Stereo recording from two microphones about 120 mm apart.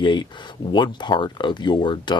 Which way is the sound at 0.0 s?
40° left (ahead or behind).